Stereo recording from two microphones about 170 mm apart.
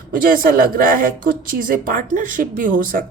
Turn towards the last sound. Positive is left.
turn(degrees=-50)  # may be behind; listen again after turning